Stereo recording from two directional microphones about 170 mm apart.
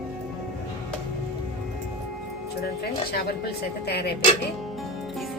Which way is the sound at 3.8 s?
70° left (ahead or behind).